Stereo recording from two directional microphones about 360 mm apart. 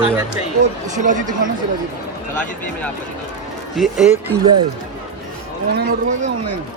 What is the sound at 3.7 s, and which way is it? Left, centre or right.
Speech, centre.